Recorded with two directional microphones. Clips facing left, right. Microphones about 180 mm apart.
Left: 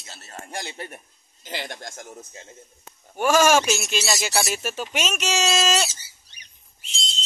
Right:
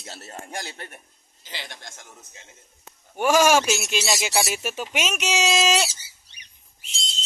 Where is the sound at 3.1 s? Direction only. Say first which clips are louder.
Even; 15° right (ahead or behind).